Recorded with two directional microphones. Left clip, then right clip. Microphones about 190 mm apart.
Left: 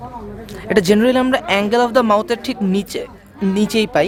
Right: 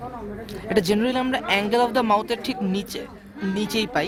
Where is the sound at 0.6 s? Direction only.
40° left (ahead or behind).